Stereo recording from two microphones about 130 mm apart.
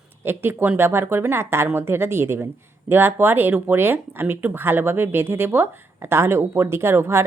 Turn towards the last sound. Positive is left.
turn(degrees=-20)  # may be behind; listen again after turning